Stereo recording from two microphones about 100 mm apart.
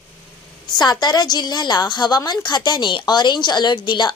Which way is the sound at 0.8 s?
45° left (ahead or behind).